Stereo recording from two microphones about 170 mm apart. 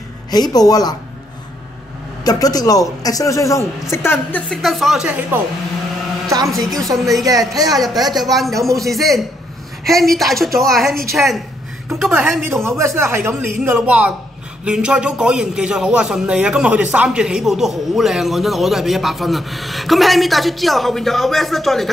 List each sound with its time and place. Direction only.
0.3 s a man's voice: 25° left (ahead or behind)
2.2 s a man's voice: 20° left (ahead or behind); by 5.4 s 10° right (ahead or behind)
6.5 s a man's voice: centre (ahead or behind)
7.2 s speech: 20° right (ahead or behind)
7.7 s a man's voice: centre (ahead or behind)
12.1 s a man's voice: 15° right (ahead or behind)